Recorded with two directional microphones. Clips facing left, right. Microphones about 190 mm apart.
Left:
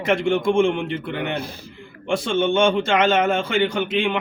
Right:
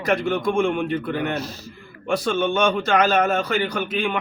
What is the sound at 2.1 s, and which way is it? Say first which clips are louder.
A man's voice: left 2 dB; 25° left (ahead or behind).